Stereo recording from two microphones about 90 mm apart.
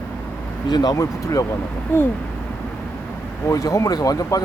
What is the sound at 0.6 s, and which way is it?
Speech, 50° left (ahead or behind).